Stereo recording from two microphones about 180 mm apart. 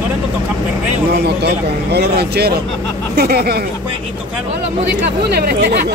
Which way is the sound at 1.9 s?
65° right (ahead or behind).